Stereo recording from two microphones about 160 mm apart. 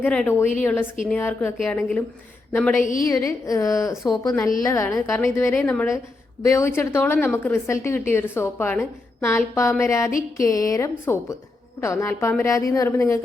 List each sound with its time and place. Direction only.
0.0 s a woman's voice: 10° left (ahead or behind)